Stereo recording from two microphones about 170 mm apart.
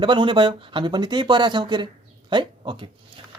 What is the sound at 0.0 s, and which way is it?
Speech, 30° right (ahead or behind).